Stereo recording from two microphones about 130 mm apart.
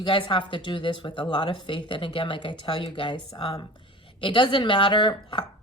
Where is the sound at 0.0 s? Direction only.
40° left (ahead or behind).